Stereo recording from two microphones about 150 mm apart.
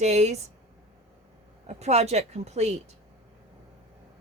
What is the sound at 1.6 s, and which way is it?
A woman's voice, 45° right (ahead or behind).